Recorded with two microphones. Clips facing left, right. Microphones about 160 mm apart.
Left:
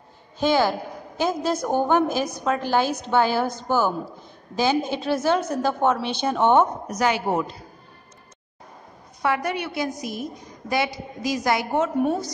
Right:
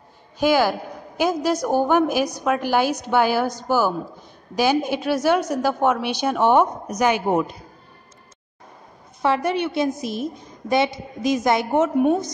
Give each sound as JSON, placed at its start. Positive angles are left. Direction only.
{"t": 0.4, "sound": "a woman's voice", "side_deg": -5}
{"t": 9.2, "sound": "a woman's voice", "side_deg": -25}